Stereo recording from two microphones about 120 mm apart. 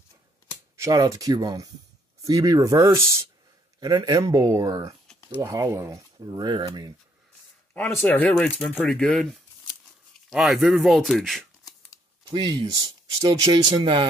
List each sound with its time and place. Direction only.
0.7 s speech: 25° right (ahead or behind)
7.7 s speech: 15° left (ahead or behind)
12.3 s speech: 35° right (ahead or behind)